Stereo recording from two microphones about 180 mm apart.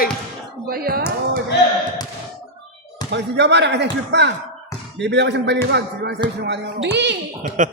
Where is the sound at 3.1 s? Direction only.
75° right (ahead or behind).